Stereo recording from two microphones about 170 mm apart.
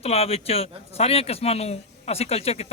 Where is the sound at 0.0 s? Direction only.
35° left (ahead or behind).